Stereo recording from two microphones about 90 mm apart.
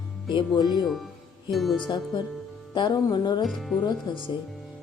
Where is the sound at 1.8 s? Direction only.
55° left (ahead or behind).